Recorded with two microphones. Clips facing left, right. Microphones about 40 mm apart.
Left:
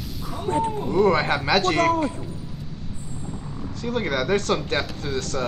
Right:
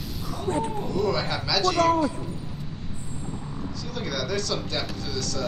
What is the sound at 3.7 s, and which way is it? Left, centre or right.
Speech, left.